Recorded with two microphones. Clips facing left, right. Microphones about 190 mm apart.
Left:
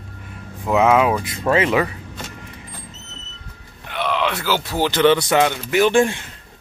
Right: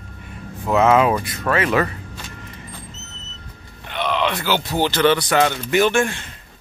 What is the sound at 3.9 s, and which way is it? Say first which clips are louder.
Groan: even; 5° left (ahead or behind).